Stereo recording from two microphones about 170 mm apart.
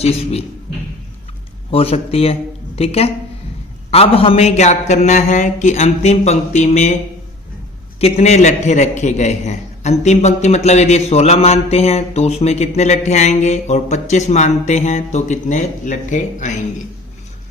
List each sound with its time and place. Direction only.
0.0 s a man's voice: 35° left (ahead or behind)
1.7 s a man's voice: 35° left (ahead or behind)
8.0 s a man's voice: 40° left (ahead or behind)